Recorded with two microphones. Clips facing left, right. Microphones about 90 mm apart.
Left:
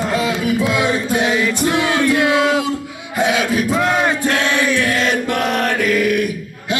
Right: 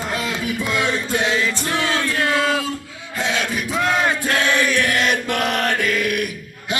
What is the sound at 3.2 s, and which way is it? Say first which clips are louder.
Chant: left 6 dB; 10° left (ahead or behind).